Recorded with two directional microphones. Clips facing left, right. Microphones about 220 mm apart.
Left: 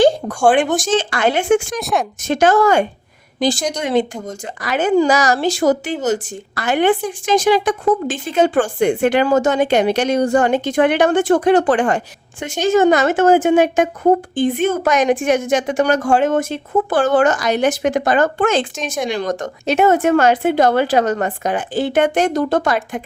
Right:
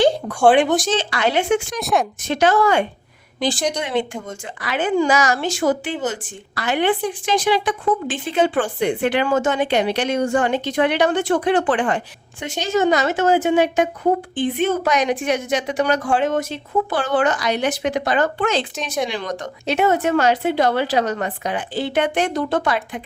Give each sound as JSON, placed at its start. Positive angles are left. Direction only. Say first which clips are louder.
{"t": 0.8, "sound": "speech", "louder": "left 3 dB", "side_deg": 50}
{"t": 1.8, "sound": "speech", "louder": "even", "side_deg": 0}
{"t": 2.2, "sound": "a woman's voice", "louder": "left 5 dB", "side_deg": 45}